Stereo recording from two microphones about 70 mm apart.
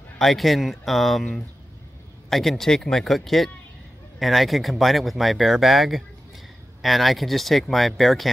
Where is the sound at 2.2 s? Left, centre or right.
Centre.